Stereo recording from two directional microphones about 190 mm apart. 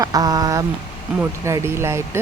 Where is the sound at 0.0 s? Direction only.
20° right (ahead or behind).